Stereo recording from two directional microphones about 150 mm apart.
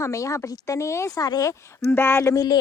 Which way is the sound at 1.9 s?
15° left (ahead or behind).